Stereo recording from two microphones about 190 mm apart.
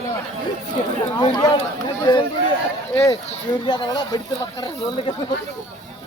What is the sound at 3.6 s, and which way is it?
Speech, 25° left (ahead or behind).